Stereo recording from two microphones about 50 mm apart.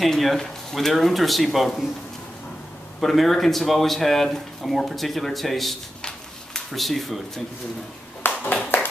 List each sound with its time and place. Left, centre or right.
0.0 s speech: centre
3.0 s speech: centre
8.2 s clapping: left